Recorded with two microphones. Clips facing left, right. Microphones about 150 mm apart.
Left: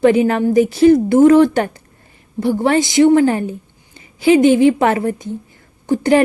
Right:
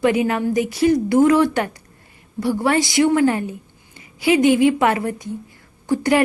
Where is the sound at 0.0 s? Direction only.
35° left (ahead or behind).